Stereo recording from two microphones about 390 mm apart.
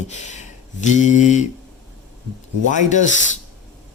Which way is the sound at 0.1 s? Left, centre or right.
Centre.